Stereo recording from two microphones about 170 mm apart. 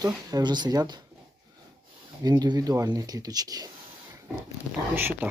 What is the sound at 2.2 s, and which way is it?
Speech, 25° right (ahead or behind).